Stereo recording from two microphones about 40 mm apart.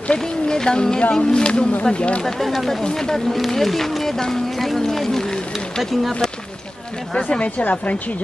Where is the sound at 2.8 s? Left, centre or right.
Centre.